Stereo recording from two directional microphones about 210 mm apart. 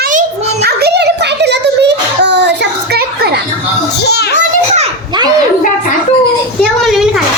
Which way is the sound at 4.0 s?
50° left (ahead or behind).